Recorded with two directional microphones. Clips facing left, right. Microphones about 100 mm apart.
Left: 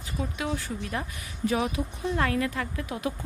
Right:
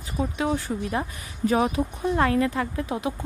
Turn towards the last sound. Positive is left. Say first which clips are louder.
# right 4 dB
turn(degrees=-30)  # may be behind; listen again after turning